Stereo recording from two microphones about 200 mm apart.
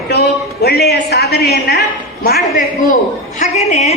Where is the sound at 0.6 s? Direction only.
55° left (ahead or behind).